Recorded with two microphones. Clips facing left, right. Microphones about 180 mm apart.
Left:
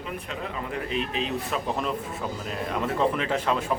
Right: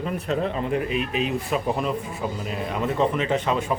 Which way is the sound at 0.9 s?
10° right (ahead or behind).